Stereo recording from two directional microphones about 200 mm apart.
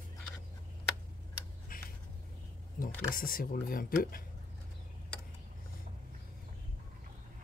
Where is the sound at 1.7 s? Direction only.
45° left (ahead or behind).